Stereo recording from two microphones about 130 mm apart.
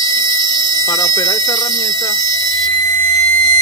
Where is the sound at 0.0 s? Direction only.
30° left (ahead or behind).